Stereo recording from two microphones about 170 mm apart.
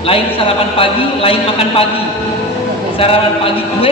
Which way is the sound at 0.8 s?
35° left (ahead or behind).